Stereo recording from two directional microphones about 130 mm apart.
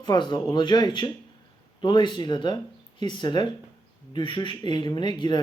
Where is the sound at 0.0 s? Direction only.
35° left (ahead or behind).